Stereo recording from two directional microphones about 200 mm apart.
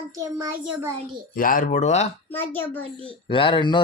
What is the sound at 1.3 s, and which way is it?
Speech, 45° left (ahead or behind).